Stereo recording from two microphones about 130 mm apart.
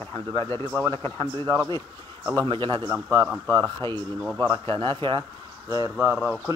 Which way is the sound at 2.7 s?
35° right (ahead or behind).